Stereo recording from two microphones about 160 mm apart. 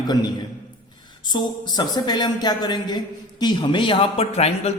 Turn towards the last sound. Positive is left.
turn(degrees=40)  # may be behind; listen again after turning